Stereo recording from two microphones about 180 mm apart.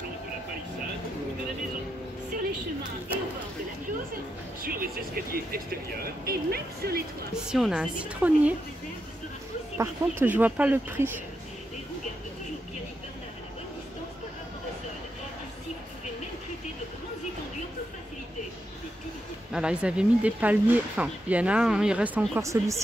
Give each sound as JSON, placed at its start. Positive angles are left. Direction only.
{"t": 4.6, "sound": "speech", "side_deg": -55}
{"t": 7.4, "sound": "a woman's voice", "side_deg": 0}
{"t": 9.8, "sound": "speech", "side_deg": -10}
{"t": 19.5, "sound": "speech", "side_deg": -5}